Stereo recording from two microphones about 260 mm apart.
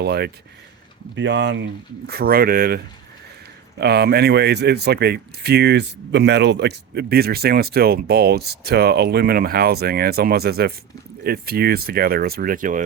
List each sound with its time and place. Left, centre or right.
0.0 s speech: right